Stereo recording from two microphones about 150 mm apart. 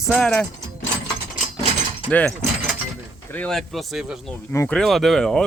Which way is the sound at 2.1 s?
10° left (ahead or behind).